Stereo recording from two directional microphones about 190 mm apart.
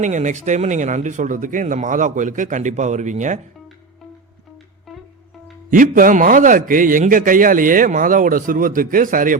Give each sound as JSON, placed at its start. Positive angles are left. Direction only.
{"t": 0.0, "sound": "speech", "side_deg": -40}
{"t": 5.7, "sound": "a man's voice", "side_deg": -45}